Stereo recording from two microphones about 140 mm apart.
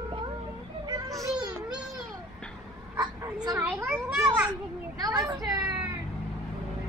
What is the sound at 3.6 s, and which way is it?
Children playing, 10° right (ahead or behind).